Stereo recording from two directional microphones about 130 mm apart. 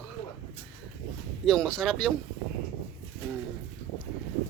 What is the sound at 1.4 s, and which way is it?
Speech, 5° left (ahead or behind).